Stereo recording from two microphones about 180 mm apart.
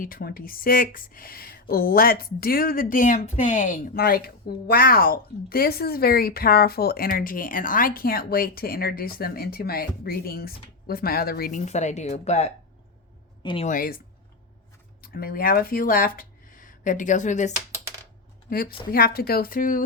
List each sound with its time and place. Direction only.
0.0 s speech: 55° left (ahead or behind); by 12.5 s 40° left (ahead or behind)
13.4 s speech: 25° left (ahead or behind)
13.7 s speech: 50° left (ahead or behind)
15.0 s speech: 55° left (ahead or behind)
18.5 s speech: 55° left (ahead or behind)